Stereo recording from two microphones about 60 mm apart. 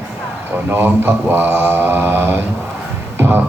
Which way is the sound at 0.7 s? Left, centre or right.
Right.